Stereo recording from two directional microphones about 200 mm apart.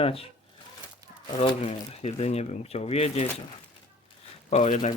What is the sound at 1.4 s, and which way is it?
Speech, 30° left (ahead or behind).